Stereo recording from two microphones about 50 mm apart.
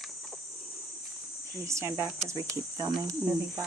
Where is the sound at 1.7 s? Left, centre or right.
Right.